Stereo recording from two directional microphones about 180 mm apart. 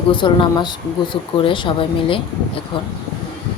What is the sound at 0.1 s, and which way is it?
Speech, 25° left (ahead or behind).